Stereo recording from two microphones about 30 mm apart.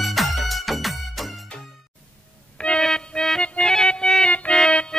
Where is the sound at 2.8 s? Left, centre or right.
Left.